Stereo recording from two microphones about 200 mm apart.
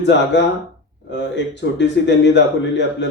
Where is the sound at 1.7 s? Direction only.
60° left (ahead or behind).